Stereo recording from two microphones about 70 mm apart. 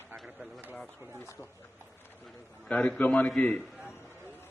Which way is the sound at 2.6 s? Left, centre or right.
Centre.